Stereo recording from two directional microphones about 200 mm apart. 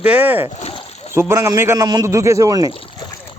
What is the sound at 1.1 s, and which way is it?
A man's voice, 15° right (ahead or behind).